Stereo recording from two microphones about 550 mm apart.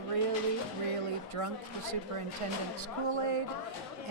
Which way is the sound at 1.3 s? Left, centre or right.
Right.